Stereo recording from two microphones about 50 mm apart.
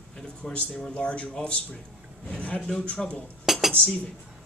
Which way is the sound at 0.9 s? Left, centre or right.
Left.